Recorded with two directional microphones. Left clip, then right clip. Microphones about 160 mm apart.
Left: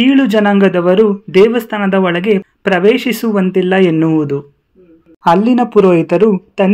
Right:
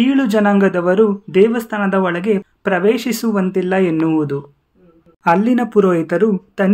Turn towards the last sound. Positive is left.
turn(degrees=15)  # may be behind; listen again after turning